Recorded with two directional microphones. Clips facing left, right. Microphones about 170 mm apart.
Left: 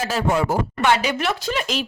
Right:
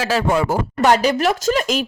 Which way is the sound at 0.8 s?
40° right (ahead or behind).